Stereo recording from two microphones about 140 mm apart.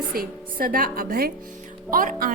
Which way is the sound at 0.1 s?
90° right.